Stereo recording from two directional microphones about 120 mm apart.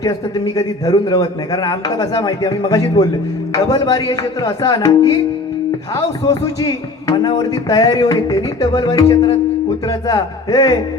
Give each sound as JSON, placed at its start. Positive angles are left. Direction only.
{"t": 0.0, "sound": "music", "side_deg": 30}
{"t": 6.2, "sound": "music", "side_deg": 30}